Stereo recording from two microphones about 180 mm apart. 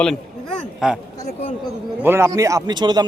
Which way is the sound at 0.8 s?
5° right (ahead or behind).